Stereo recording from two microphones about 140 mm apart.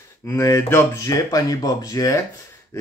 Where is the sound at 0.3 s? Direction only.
25° left (ahead or behind).